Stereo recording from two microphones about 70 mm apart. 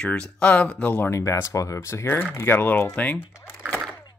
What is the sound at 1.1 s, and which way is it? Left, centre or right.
Speech, left.